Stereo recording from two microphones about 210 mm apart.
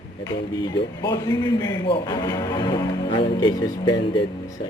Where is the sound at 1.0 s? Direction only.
20° left (ahead or behind).